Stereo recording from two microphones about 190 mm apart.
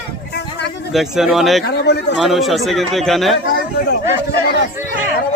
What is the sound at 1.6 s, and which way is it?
Speech, 60° left (ahead or behind).